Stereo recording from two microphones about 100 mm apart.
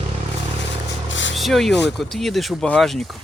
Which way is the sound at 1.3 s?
Centre (ahead or behind).